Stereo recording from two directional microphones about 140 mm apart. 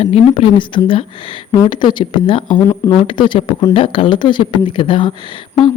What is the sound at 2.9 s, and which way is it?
Speech, 35° left (ahead or behind).